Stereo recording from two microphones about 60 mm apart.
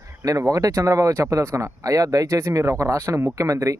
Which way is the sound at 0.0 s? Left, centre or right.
Right.